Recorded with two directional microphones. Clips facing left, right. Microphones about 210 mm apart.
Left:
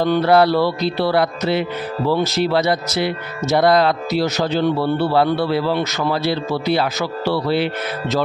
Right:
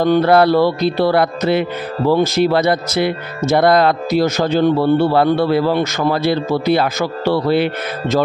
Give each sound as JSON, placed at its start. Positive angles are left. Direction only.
{"t": 0.0, "sound": "music", "side_deg": -50}